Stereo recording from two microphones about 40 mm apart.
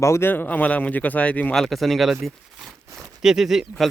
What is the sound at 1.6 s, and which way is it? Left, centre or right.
Speech, centre.